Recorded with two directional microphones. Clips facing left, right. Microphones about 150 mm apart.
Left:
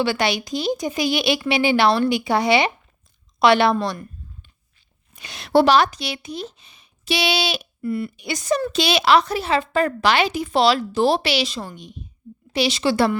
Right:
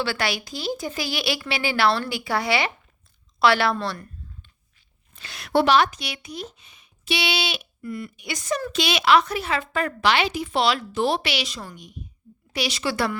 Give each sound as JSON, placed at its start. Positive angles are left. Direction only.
{"t": 0.0, "sound": "speech", "side_deg": 20}
{"t": 5.1, "sound": "speech", "side_deg": 20}